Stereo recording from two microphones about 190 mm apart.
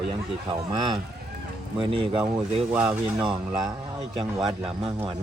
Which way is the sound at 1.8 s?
30° right (ahead or behind).